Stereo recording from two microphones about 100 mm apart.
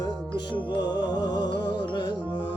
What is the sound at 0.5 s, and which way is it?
Music, 45° left (ahead or behind).